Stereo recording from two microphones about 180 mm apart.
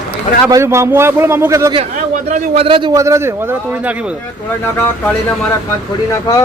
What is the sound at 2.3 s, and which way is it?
A man's voice, 40° right (ahead or behind).